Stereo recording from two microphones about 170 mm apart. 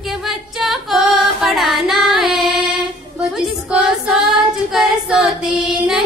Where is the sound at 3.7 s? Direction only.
5° right (ahead or behind).